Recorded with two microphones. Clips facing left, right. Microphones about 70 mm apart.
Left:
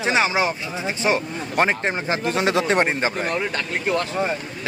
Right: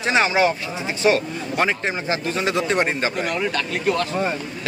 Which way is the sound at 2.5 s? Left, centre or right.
Left.